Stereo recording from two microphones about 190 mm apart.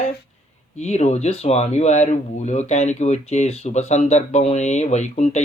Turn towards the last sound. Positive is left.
turn(degrees=35)  # may be behind; listen again after turning